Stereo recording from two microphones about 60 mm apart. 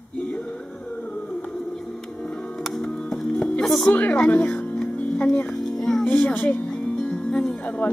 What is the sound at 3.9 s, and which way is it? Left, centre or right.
Speech, left.